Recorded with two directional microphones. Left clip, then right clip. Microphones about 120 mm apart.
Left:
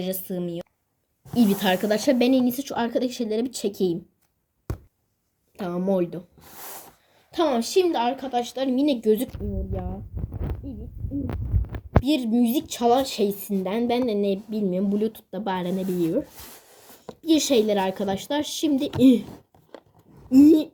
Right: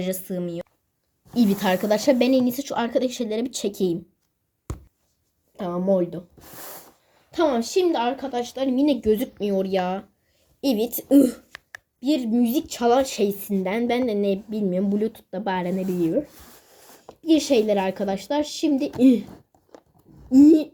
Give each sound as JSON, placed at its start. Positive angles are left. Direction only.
{"t": 0.0, "sound": "a woman's voice", "side_deg": 0}
{"t": 5.5, "sound": "a woman's voice", "side_deg": 20}
{"t": 7.3, "sound": "a woman's voice", "side_deg": 10}
{"t": 12.0, "sound": "a woman's voice", "side_deg": 0}
{"t": 17.2, "sound": "a woman's voice", "side_deg": 25}
{"t": 20.3, "sound": "a woman's voice", "side_deg": 25}